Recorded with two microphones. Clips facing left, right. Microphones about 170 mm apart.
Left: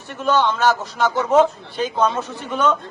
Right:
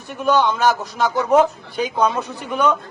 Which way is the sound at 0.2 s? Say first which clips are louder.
Right 1 dB; 15° right (ahead or behind).